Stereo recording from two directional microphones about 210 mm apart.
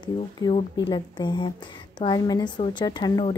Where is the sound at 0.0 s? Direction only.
25° left (ahead or behind).